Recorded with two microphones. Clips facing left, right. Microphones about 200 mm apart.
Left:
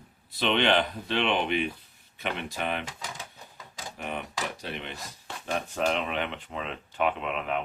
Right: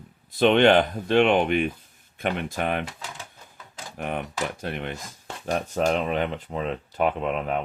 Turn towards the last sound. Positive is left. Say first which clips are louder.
# right 4 dB
turn(degrees=-40)  # may be behind; listen again after turning